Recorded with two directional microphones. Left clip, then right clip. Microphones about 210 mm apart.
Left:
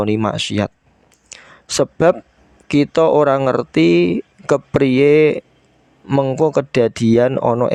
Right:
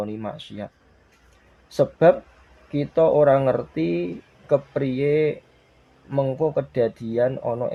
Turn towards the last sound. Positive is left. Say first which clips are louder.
# left 8 dB
turn(degrees=50)  # may be behind; listen again after turning